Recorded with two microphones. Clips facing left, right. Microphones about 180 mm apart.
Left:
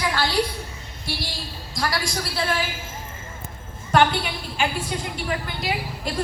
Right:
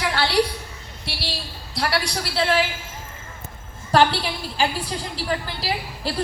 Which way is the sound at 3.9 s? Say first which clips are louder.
Right 1 dB; 35° right (ahead or behind).